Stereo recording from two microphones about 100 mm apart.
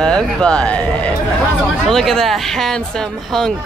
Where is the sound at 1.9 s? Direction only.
5° left (ahead or behind).